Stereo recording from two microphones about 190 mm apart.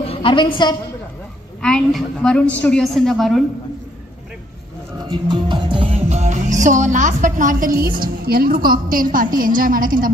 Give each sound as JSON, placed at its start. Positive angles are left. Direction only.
{"t": 0.0, "sound": "a woman's voice", "side_deg": 30}
{"t": 1.6, "sound": "a woman's voice", "side_deg": 0}
{"t": 4.9, "sound": "music", "side_deg": -25}